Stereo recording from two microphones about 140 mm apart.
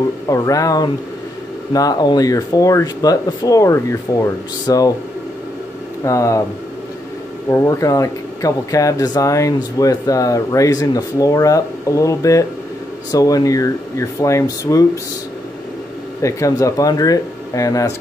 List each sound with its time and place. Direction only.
0.3 s speech: 25° left (ahead or behind)
6.0 s speech: 20° left (ahead or behind)
7.4 s speech: 25° left (ahead or behind)
16.2 s speech: 20° left (ahead or behind)